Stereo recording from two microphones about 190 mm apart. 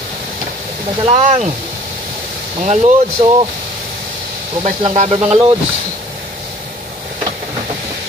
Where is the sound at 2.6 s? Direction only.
35° right (ahead or behind).